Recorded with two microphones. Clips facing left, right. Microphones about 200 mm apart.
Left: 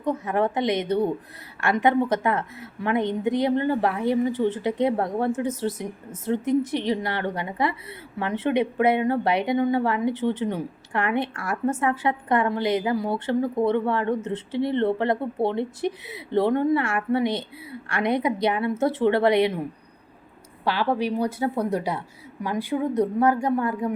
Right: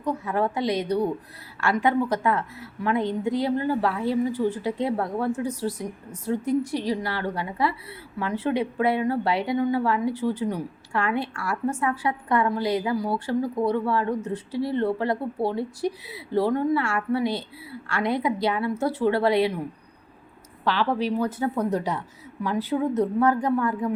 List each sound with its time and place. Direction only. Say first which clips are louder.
0.0 s a woman's voice: left 2 dB; 20° left (ahead or behind)
20.7 s a woman's voice: even; 10° left (ahead or behind)